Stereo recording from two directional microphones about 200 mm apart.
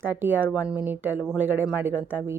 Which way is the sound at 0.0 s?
10° right (ahead or behind).